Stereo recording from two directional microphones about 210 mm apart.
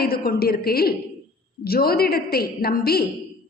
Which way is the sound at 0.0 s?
45° left (ahead or behind).